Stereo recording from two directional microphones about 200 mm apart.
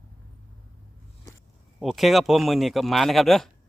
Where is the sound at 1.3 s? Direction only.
20° left (ahead or behind).